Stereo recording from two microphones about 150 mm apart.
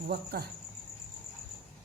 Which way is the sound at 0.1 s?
90° right.